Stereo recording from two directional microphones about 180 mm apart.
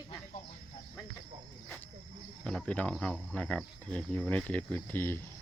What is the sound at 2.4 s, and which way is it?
Speech, 5° left (ahead or behind).